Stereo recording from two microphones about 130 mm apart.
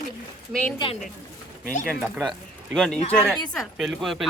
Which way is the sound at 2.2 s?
Centre (ahead or behind).